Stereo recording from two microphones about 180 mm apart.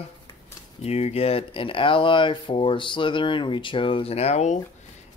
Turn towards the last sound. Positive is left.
turn(degrees=40)  # may be behind; listen again after turning